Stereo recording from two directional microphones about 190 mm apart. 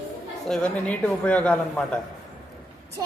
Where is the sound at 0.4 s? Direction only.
5° left (ahead or behind).